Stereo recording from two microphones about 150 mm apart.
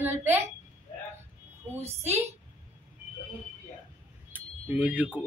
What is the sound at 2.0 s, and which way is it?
Speech, 45° right (ahead or behind).